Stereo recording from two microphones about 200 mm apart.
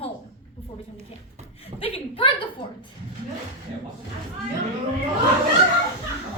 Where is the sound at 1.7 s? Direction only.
30° left (ahead or behind).